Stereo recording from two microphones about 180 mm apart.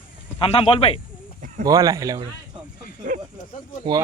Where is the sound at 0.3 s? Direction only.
30° left (ahead or behind).